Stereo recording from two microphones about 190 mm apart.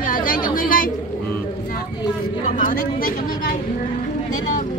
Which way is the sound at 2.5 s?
45° left (ahead or behind).